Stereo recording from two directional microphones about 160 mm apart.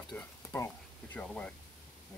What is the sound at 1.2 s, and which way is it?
Speech, 5° left (ahead or behind).